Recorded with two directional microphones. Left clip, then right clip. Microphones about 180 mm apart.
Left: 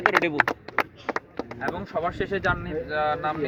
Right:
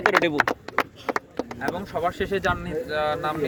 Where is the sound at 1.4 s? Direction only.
20° right (ahead or behind).